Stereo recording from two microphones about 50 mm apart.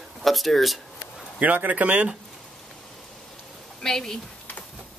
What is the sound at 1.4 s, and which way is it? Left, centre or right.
Speech, right.